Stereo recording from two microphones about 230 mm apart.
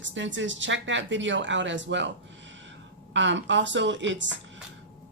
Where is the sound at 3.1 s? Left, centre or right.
Right.